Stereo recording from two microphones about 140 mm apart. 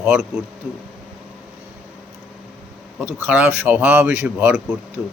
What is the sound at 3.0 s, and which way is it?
Speech, 10° right (ahead or behind).